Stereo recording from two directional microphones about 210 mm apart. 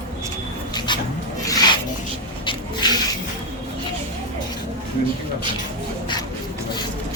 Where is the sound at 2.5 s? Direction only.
20° left (ahead or behind).